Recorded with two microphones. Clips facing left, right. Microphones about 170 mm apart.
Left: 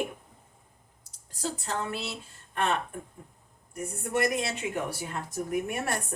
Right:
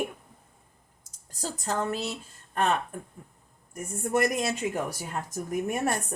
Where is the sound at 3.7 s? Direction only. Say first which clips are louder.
Right 3 dB; 40° right (ahead or behind).